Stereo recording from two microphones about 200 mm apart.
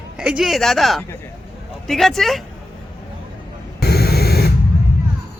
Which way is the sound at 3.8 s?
50° left (ahead or behind).